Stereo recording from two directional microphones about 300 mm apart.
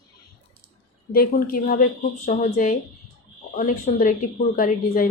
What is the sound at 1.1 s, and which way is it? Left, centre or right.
A woman's voice, left.